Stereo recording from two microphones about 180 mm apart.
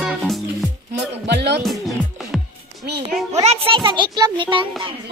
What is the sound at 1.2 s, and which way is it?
Speech, 70° right (ahead or behind).